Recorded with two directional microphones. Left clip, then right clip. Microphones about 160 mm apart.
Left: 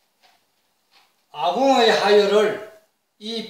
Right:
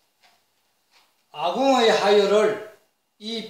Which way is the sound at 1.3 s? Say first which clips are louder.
Left 2 dB; 15° right (ahead or behind).